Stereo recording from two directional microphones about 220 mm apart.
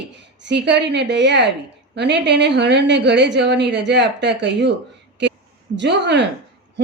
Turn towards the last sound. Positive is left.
turn(degrees=-50)  # may be behind; listen again after turning